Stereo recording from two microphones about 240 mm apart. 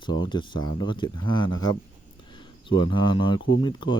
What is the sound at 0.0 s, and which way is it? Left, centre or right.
Speech, centre.